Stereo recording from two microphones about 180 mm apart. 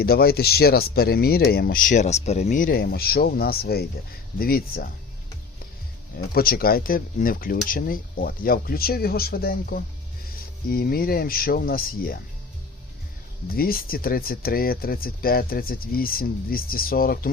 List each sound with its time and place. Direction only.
0.0 s speech: 60° left (ahead or behind)
6.3 s speech: 55° left (ahead or behind)
13.5 s speech: 55° left (ahead or behind)